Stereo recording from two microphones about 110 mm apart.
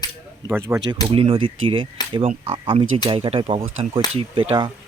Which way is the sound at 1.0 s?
55° right (ahead or behind).